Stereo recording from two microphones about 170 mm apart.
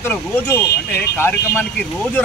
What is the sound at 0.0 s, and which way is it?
Speech, 15° left (ahead or behind).